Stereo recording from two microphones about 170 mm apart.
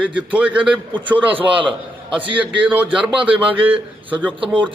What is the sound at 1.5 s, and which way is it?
Speech, 30° right (ahead or behind).